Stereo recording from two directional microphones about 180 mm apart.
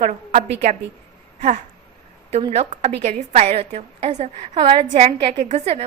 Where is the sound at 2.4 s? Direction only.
35° right (ahead or behind).